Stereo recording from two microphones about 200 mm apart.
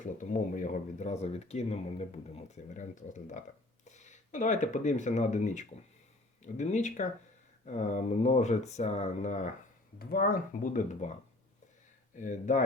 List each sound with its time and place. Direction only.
0.2 s speech: 40° left (ahead or behind)
12.1 s speech: 40° left (ahead or behind)